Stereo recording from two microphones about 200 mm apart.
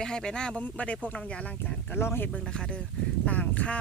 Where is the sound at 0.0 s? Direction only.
5° left (ahead or behind).